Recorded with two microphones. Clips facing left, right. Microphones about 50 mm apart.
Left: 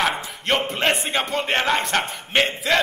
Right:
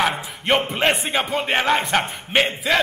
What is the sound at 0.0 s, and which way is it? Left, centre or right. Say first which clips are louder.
A man's voice: right 1 dB; centre.